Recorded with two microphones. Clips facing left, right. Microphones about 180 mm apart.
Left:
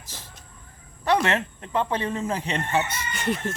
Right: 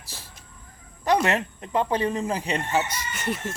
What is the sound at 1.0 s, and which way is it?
A man's voice, 15° right (ahead or behind).